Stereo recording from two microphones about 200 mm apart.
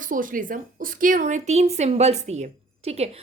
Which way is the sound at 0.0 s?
40° right (ahead or behind).